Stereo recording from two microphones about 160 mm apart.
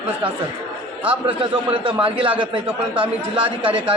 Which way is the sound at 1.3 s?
30° right (ahead or behind).